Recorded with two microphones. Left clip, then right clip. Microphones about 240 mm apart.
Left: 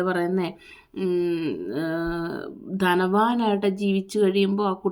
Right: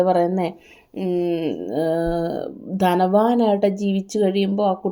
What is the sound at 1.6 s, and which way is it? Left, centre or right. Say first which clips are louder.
Speech: right 6 dB; centre.